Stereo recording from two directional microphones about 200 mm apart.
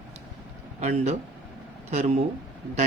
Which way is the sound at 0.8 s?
35° right (ahead or behind).